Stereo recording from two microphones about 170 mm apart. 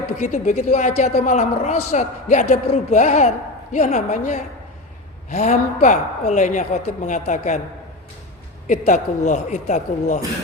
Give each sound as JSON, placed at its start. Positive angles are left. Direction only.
{"t": 0.2, "sound": "a man's voice", "side_deg": 45}
{"t": 8.6, "sound": "a man's voice", "side_deg": 45}